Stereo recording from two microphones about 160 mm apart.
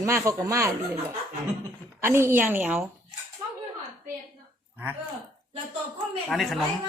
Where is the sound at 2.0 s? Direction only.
15° right (ahead or behind).